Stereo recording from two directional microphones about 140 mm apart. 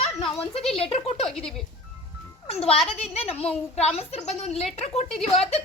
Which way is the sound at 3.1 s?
45° left (ahead or behind).